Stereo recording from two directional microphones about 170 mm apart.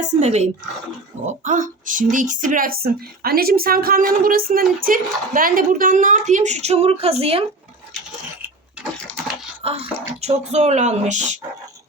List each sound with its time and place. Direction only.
0.0 s a woman's voice: 40° right (ahead or behind)
8.8 s a sound: centre (ahead or behind)
9.6 s speech: 35° right (ahead or behind)